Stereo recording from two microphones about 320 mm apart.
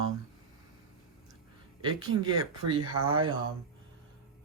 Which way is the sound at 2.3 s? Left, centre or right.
Right.